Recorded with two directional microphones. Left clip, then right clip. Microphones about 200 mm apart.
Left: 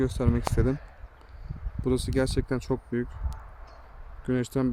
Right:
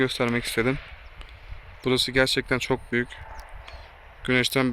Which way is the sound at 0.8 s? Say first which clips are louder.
Right 8 dB; 45° left (ahead or behind).